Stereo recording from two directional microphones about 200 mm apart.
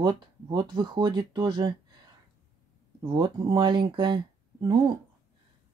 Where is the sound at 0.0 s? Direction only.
20° right (ahead or behind).